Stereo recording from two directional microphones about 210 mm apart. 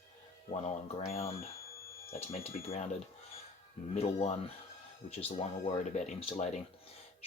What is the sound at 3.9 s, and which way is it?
Speech, 30° left (ahead or behind).